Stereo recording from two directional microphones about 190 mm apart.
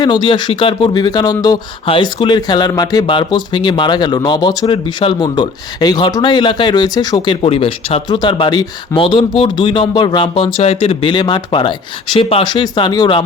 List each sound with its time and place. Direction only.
0.0 s speech: 25° left (ahead or behind)